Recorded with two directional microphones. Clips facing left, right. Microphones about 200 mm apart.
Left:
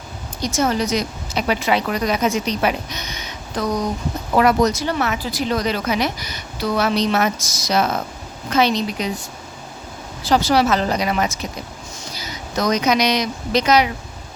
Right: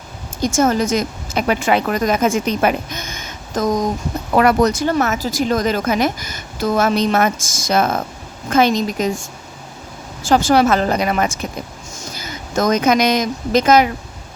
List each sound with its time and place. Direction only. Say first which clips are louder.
0.4 s speech: right 4 dB; 50° right (ahead or behind)
4.4 s speech: right 2 dB; 60° right (ahead or behind)
10.2 s speech: right 3 dB; 50° right (ahead or behind)